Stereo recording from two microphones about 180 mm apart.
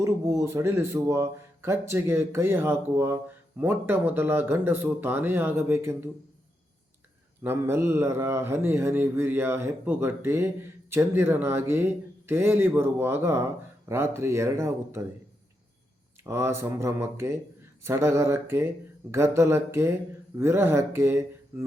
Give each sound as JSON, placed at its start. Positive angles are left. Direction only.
{"t": 0.0, "sound": "a man's voice", "side_deg": -15}
{"t": 7.4, "sound": "a man's voice", "side_deg": -15}
{"t": 16.2, "sound": "a man's voice", "side_deg": -15}